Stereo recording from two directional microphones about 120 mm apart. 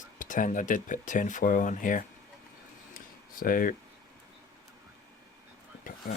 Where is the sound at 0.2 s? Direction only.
90° left.